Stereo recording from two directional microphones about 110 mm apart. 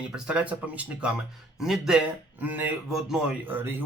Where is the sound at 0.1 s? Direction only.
10° right (ahead or behind).